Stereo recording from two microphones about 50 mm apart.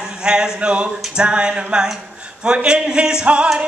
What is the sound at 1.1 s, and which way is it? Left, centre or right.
A man's voice, centre.